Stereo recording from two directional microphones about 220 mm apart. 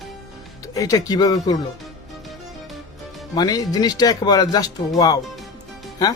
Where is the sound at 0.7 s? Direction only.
15° left (ahead or behind).